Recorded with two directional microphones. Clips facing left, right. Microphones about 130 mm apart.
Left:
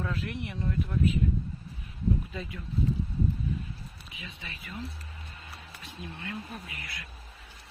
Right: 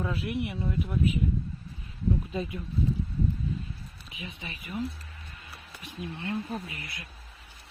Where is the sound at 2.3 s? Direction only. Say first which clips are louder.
Right 6 dB; 20° right (ahead or behind).